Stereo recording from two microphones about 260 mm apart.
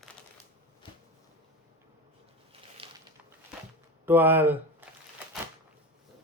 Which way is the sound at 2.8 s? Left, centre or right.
Right.